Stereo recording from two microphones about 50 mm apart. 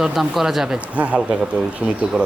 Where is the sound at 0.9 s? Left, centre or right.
Right.